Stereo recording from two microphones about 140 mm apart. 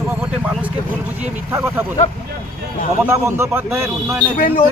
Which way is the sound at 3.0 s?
15° right (ahead or behind).